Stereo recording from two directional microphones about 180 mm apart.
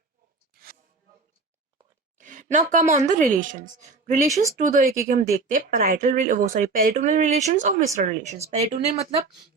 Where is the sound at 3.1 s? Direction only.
40° right (ahead or behind).